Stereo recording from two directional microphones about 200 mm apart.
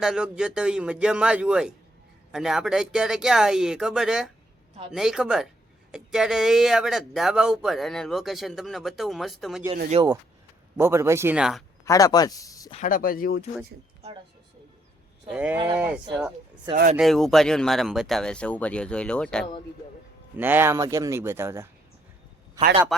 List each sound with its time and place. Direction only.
0.0 s speech: 5° right (ahead or behind)
9.9 s speech: 20° right (ahead or behind); by 11.6 s 5° right (ahead or behind)
11.9 s speech: 15° left (ahead or behind)
12.7 s speech: 40° left (ahead or behind)
15.3 s speech: 5° right (ahead or behind)
16.7 s speech: 20° right (ahead or behind)
17.0 s speech: centre (ahead or behind)
20.3 s speech: 10° right (ahead or behind)
22.9 s speech: centre (ahead or behind)